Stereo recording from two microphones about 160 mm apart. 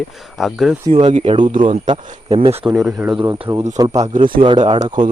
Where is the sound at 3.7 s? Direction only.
25° right (ahead or behind).